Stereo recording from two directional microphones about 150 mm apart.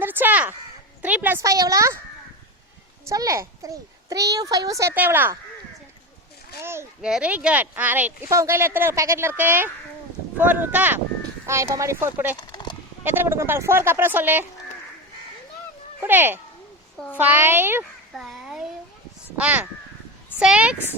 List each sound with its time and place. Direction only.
0.0 s crow: 15° right (ahead or behind)
1.0 s a woman's voice: 10° right (ahead or behind)
3.1 s a child's voice: 20° right (ahead or behind)
6.6 s speech: 15° right (ahead or behind)
7.0 s speech: 5° right (ahead or behind)
12.4 s horse: 30° left (ahead or behind)
13.1 s speech: 15° right (ahead or behind)
16.0 s speech: 15° right (ahead or behind)
18.1 s a sound: centre (ahead or behind)
19.4 s speech: 10° right (ahead or behind)